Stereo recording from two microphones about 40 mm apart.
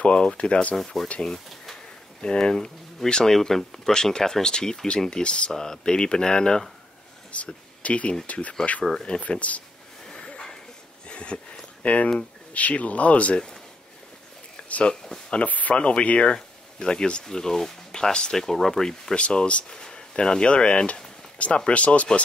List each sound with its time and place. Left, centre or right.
0.0 s speech: left
1.0 s speech: centre
2.2 s speech: centre
7.4 s speech: left
10.2 s a sound: left
11.8 s speech: left
14.9 s speech: centre
15.4 s speech: left
15.7 s speech: left
16.3 s speech: centre
19.1 s speech: left